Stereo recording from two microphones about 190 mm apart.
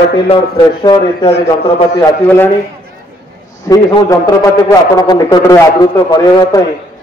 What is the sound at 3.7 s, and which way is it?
A man's voice, 20° left (ahead or behind).